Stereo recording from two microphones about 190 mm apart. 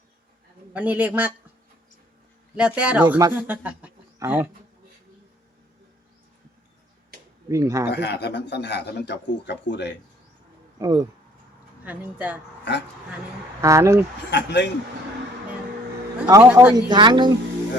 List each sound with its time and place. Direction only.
0.7 s a woman's voice: 10° right (ahead or behind)
2.6 s speech: 5° right (ahead or behind)
7.5 s a woman's voice: 15° right (ahead or behind)
7.9 s a man's voice: 60° left (ahead or behind)
10.8 s a woman's voice: 20° right (ahead or behind)
13.6 s a woman's voice: 15° right (ahead or behind)
14.3 s a man's voice: 65° left (ahead or behind)
16.2 s a man's voice: 15° right (ahead or behind)